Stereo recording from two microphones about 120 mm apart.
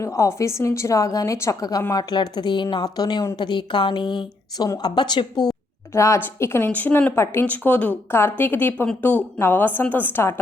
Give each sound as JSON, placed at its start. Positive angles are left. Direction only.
{"t": 0.0, "sound": "a woman's voice", "side_deg": 25}
{"t": 5.5, "sound": "a woman's voice", "side_deg": 25}